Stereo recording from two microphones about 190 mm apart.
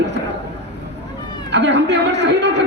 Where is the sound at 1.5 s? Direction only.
65° right (ahead or behind).